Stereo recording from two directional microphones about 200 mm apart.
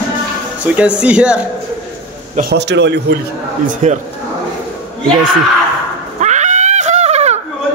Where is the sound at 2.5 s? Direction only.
60° right (ahead or behind).